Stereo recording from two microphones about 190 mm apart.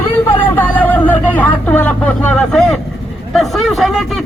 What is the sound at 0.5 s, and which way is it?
Speech, 10° left (ahead or behind).